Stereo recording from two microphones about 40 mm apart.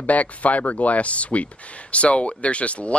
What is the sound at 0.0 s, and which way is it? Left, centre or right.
Speech, left.